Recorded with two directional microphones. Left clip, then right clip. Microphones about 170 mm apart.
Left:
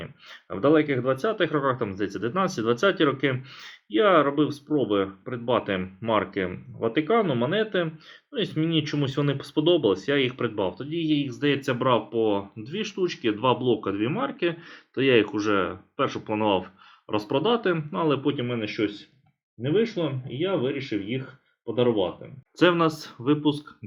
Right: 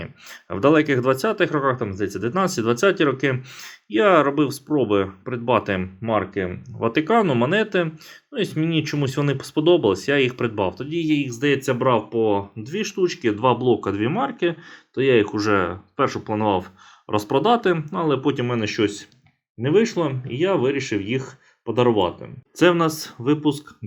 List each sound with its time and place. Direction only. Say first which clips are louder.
0.0 s speech: right 4 dB; 25° right (ahead or behind)
5.8 s speech: right 2 dB; 5° right (ahead or behind)
6.7 s speech: right 4 dB; 25° right (ahead or behind)
14.9 s speech: right 3 dB; 5° right (ahead or behind)
15.4 s speech: right 4 dB; 25° right (ahead or behind)
18.2 s speech: right 5 dB; 35° right (ahead or behind)
19.6 s speech: right 5 dB; 40° right (ahead or behind)
22.5 s speech: right 3 dB; 10° right (ahead or behind)